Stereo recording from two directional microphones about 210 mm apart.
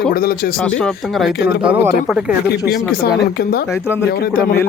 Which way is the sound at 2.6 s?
50° left (ahead or behind).